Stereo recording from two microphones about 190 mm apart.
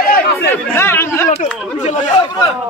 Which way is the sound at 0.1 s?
50° left (ahead or behind).